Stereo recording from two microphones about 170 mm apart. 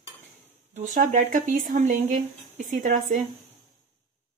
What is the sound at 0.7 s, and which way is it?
Speech, 45° right (ahead or behind).